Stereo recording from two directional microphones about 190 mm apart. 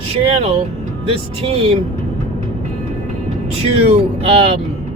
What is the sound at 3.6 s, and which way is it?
Speech, 30° right (ahead or behind).